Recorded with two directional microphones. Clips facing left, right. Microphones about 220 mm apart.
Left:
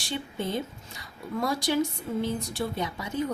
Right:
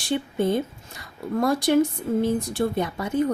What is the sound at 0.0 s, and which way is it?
Speech, 55° right (ahead or behind).